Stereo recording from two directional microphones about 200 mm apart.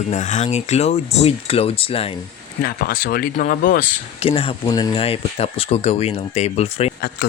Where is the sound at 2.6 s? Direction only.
45° left (ahead or behind).